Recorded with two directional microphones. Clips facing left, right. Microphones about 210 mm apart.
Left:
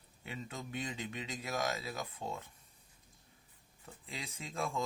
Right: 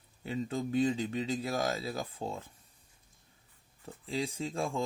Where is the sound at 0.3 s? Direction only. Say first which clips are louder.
Right 10 dB; 30° right (ahead or behind).